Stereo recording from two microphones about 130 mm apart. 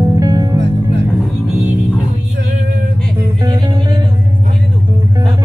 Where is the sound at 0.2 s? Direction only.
30° right (ahead or behind).